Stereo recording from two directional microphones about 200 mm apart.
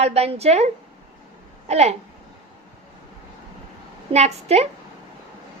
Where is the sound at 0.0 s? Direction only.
30° right (ahead or behind).